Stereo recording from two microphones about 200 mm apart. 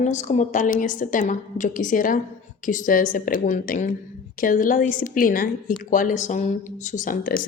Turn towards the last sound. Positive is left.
turn(degrees=45)  # may be behind; listen again after turning